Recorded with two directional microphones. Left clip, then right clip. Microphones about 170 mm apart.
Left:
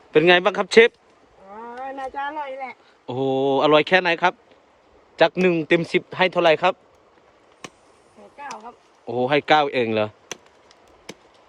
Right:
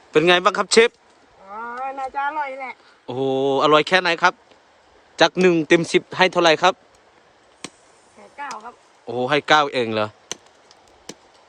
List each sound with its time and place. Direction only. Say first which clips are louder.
0.1 s speech: even; 15° right (ahead or behind)
1.8 s a sound: right 3 dB; 60° right (ahead or behind)
3.1 s speech: right 1 dB; 10° right (ahead or behind)
9.0 s speech: right 1 dB; 10° right (ahead or behind)